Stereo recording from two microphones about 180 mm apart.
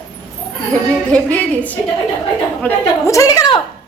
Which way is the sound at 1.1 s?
5° left (ahead or behind).